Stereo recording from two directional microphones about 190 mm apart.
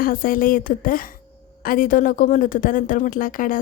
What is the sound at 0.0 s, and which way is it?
A woman's voice, 50° left (ahead or behind).